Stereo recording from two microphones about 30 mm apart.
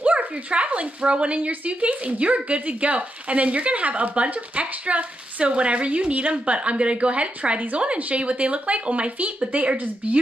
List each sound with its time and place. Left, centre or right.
0.5 s a woman's voice: right